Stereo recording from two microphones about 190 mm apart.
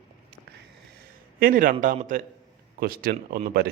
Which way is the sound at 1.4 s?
50° right (ahead or behind).